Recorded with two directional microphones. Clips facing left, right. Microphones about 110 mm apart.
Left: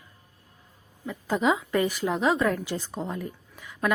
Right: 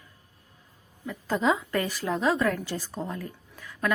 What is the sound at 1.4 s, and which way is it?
Speech, 5° left (ahead or behind).